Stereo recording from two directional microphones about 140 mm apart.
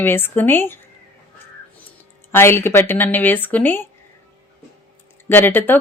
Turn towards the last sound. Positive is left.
turn(degrees=15)  # may be behind; listen again after turning